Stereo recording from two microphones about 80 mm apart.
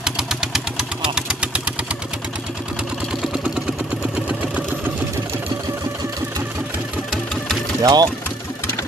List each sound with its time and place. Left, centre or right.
0.0 s vehicle: centre
3.5 s vehicle: centre
7.8 s speech: right